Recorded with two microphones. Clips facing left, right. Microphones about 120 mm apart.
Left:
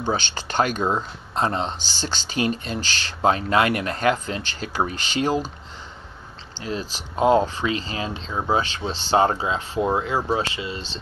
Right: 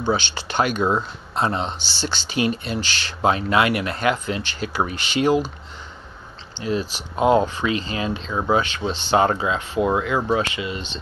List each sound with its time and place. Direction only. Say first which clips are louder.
0.0 s speech: right 2 dB; 40° left (ahead or behind)
6.6 s speech: right 5 dB; 30° left (ahead or behind)
7.2 s speech: right 1 dB; 20° right (ahead or behind)
7.4 s speech: right 2 dB; 30° left (ahead or behind)